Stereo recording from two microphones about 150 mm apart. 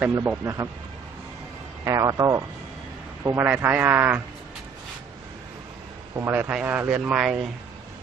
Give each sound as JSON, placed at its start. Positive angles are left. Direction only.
{"t": 0.0, "sound": "speech", "side_deg": -15}
{"t": 1.8, "sound": "speech", "side_deg": -20}
{"t": 3.2, "sound": "speech", "side_deg": -10}
{"t": 6.1, "sound": "speech", "side_deg": -15}